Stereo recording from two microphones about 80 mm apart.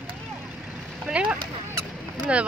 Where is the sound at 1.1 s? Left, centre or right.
Centre.